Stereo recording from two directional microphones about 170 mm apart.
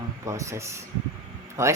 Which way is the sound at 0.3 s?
20° right (ahead or behind).